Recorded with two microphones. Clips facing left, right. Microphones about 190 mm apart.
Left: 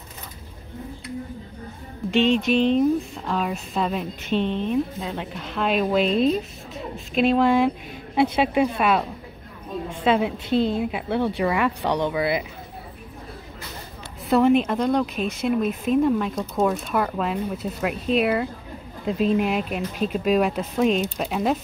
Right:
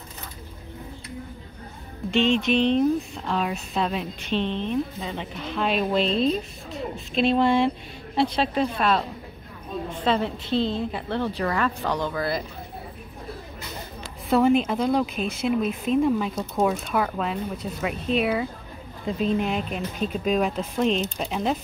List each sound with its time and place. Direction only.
2.5 s speech: 5° left (ahead or behind)
7.2 s a woman's voice: 5° left (ahead or behind)
11.8 s speech: 30° left (ahead or behind)
12.1 s a woman's voice: 10° left (ahead or behind)
14.3 s speech: centre (ahead or behind)